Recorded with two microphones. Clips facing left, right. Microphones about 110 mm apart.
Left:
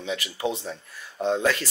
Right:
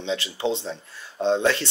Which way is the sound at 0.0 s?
30° right (ahead or behind).